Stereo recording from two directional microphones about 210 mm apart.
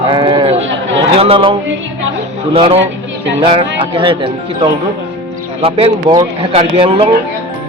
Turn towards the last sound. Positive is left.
turn(degrees=-25)  # may be behind; listen again after turning